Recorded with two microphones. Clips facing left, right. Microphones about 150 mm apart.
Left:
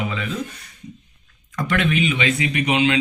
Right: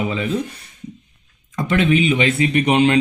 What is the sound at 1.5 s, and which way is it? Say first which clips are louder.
Speech: right 4 dB; 25° right (ahead or behind).